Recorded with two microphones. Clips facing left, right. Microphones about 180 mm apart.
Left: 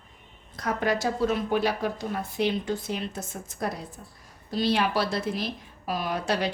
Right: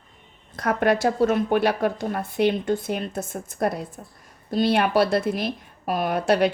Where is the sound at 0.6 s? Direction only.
60° right (ahead or behind).